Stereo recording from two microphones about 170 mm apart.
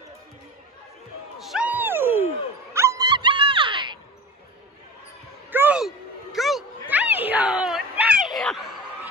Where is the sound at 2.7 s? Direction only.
20° right (ahead or behind).